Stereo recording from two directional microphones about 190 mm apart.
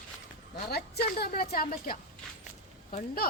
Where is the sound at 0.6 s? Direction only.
55° left (ahead or behind).